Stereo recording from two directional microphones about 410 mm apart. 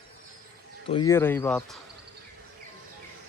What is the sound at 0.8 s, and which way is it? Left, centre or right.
Speech, centre.